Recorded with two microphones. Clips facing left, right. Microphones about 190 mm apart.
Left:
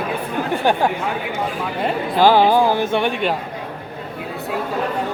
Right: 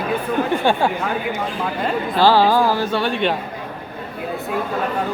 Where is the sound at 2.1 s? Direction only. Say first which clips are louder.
Left 1 dB; 15° left (ahead or behind).